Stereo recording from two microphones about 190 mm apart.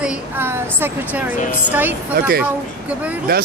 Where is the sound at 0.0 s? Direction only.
10° right (ahead or behind).